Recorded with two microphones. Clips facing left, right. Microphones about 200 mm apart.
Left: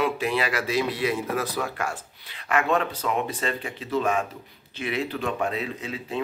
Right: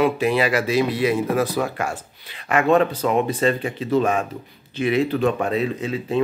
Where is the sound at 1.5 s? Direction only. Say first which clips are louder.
Right 5 dB; 20° right (ahead or behind).